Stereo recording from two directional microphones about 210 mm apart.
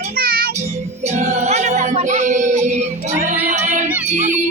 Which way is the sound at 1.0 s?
30° right (ahead or behind).